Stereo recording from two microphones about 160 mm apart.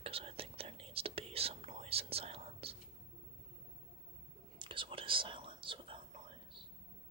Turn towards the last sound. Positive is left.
turn(degrees=-30)  # may be behind; listen again after turning